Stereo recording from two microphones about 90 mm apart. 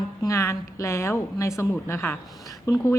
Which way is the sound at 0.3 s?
35° left (ahead or behind).